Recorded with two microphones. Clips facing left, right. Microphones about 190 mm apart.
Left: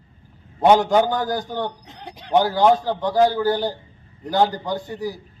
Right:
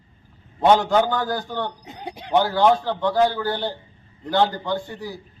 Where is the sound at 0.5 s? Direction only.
15° left (ahead or behind).